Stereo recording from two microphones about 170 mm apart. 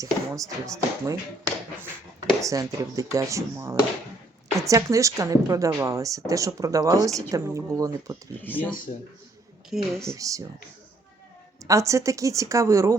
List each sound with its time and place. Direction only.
0.0 s speech: 20° right (ahead or behind)
2.4 s speech: 20° right (ahead or behind)
8.4 s speech: 10° left (ahead or behind)
10.2 s speech: 20° right (ahead or behind)
11.6 s speech: 20° right (ahead or behind)